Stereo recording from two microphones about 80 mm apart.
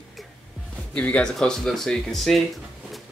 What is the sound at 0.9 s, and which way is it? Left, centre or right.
Speech, centre.